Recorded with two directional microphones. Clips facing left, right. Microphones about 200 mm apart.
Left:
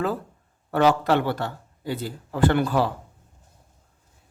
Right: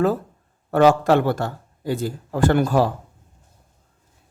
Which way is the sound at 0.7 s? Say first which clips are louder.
Right 4 dB; 45° right (ahead or behind).